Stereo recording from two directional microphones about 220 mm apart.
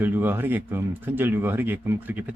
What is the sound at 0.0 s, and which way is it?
Speech, 10° right (ahead or behind).